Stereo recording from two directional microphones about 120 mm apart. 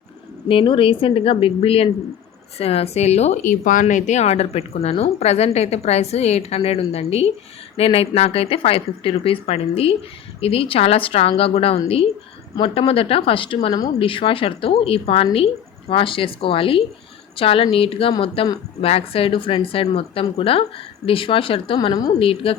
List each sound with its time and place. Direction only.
0.4 s speech: 45° left (ahead or behind)